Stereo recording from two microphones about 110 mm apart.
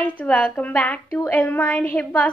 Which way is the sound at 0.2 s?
10° left (ahead or behind).